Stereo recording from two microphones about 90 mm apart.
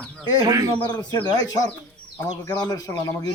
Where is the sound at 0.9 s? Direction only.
50° left (ahead or behind).